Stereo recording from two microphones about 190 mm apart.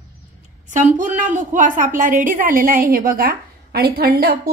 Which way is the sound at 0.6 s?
40° right (ahead or behind).